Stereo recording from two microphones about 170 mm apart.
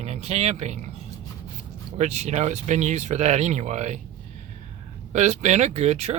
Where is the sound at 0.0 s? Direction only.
40° right (ahead or behind).